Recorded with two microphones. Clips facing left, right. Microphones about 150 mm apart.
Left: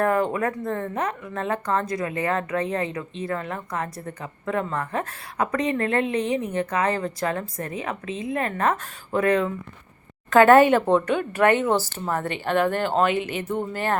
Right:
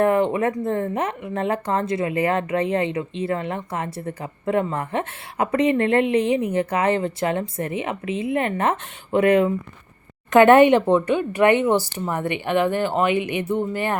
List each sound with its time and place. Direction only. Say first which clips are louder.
0.0 s speech: right 4 dB; 20° right (ahead or behind)
6.1 s a woman's voice: right 5 dB; 35° left (ahead or behind)
6.5 s speech: right 3 dB; 30° right (ahead or behind); by 13.9 s 10° right (ahead or behind)